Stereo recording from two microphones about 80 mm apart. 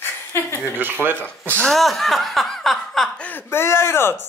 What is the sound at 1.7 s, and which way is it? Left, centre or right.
Speech, centre.